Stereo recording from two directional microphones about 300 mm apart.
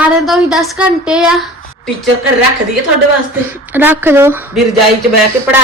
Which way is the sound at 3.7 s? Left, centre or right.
Centre.